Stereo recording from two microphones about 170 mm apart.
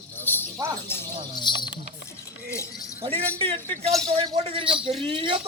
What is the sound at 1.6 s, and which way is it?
Speech, 90° left.